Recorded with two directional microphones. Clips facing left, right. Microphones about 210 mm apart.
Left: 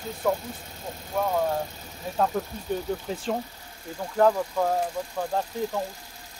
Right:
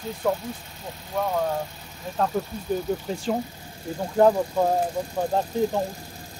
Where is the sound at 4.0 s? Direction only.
25° right (ahead or behind).